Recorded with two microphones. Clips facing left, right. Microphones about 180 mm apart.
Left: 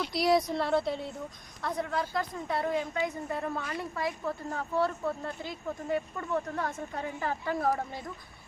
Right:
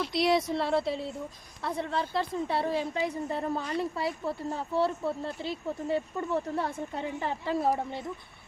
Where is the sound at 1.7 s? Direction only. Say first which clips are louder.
Right 1 dB; 30° right (ahead or behind).